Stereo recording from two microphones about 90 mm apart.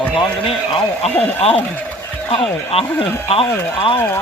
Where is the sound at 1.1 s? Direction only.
20° left (ahead or behind).